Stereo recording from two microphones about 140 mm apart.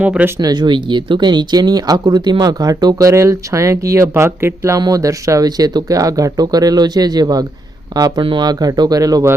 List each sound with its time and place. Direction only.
0.0 s speech: 10° right (ahead or behind)
0.3 s speech: 30° right (ahead or behind)